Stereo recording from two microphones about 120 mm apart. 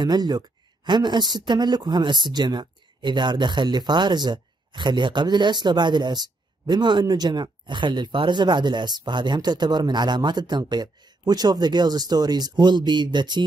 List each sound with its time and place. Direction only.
0.0 s speech: 35° right (ahead or behind)